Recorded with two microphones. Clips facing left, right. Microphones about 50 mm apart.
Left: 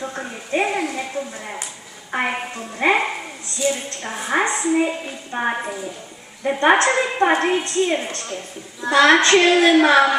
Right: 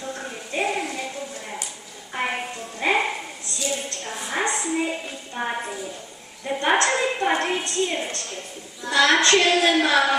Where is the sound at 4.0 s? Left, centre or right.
Left.